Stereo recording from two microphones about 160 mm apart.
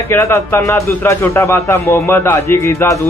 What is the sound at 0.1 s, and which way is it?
A man's voice, 15° left (ahead or behind).